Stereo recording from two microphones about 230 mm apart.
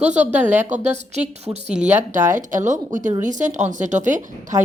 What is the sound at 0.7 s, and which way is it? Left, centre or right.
Speech, right.